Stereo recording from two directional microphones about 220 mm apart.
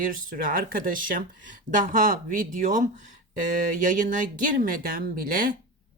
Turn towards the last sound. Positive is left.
turn(degrees=-40)  # may be behind; listen again after turning